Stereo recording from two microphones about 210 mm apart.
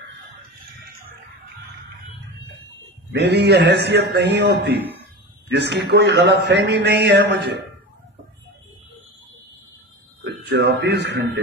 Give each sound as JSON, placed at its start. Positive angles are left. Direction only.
{"t": 3.1, "sound": "a man's voice", "side_deg": -55}
{"t": 10.2, "sound": "speech", "side_deg": -50}